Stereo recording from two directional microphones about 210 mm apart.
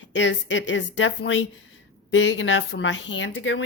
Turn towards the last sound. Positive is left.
turn(degrees=65)  # may be behind; listen again after turning